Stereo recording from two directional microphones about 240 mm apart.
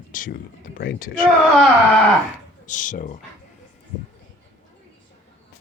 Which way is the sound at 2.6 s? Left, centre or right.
Left.